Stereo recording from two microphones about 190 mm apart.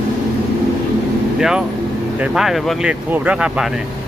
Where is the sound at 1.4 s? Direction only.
5° right (ahead or behind).